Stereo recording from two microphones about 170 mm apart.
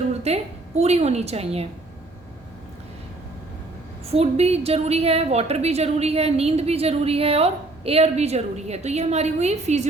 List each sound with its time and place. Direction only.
0.1 s a sound: 40° right (ahead or behind)
0.8 s a woman's voice: 40° right (ahead or behind)
4.1 s a woman's voice: 40° right (ahead or behind)